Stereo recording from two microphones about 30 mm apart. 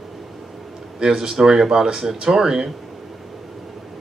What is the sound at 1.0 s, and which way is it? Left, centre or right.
Speech, right.